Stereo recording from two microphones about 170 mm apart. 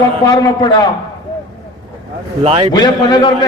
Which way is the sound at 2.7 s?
25° left (ahead or behind).